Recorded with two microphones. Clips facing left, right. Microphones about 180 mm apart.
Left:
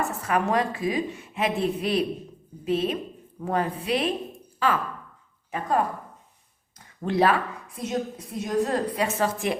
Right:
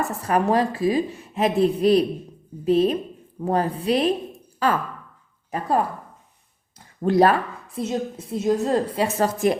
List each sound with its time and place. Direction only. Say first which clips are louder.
0.2 s a woman's voice: right 5 dB; 35° right (ahead or behind)
7.0 s a woman's voice: right 5 dB; 40° right (ahead or behind)
7.8 s a woman's voice: right 3 dB; 25° right (ahead or behind)